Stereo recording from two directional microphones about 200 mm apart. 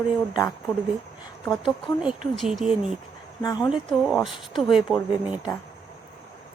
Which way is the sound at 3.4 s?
20° left (ahead or behind).